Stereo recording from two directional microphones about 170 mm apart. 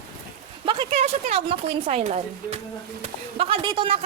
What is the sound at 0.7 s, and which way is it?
A woman's voice, 35° right (ahead or behind).